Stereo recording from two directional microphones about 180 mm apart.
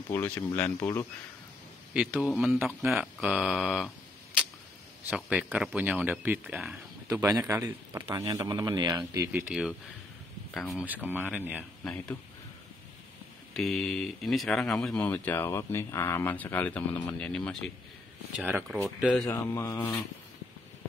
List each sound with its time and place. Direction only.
0.1 s speech: 10° left (ahead or behind)
2.0 s speech: 5° right (ahead or behind)
5.0 s speech: 5° right (ahead or behind)
7.1 s speech: 20° right (ahead or behind)
9.5 s speech: 5° right (ahead or behind)
11.1 s speech: 10° right (ahead or behind)
11.8 s speech: 5° left (ahead or behind)
13.5 s speech: centre (ahead or behind)
18.4 s speech: 10° right (ahead or behind)
19.3 s speech: 15° left (ahead or behind)